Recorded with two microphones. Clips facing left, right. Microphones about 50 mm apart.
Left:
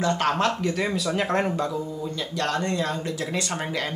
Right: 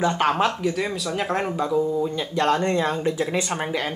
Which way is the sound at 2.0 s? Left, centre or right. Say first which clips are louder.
Right 6 dB; right.